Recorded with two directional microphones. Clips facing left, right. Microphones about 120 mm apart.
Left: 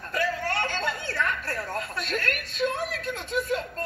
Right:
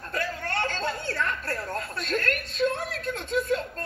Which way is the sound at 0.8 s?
35° right (ahead or behind).